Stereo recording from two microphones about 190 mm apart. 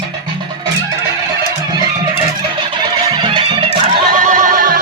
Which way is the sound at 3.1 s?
25° right (ahead or behind).